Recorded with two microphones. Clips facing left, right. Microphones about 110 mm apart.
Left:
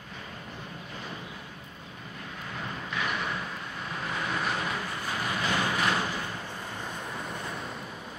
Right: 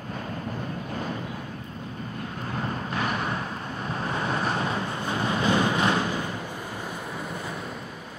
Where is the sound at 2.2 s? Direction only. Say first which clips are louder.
Right 6 dB; 45° right (ahead or behind); by 7.8 s centre (ahead or behind).